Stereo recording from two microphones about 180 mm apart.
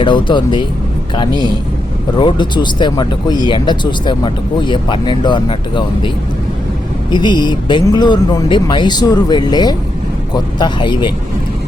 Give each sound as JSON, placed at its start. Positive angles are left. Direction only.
{"t": 0.0, "sound": "speech", "side_deg": 25}
{"t": 1.3, "sound": "a man's voice", "side_deg": -25}
{"t": 2.1, "sound": "speech", "side_deg": 25}
{"t": 7.1, "sound": "speech", "side_deg": 25}